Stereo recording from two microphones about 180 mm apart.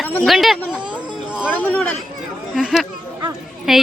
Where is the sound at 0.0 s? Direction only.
10° left (ahead or behind).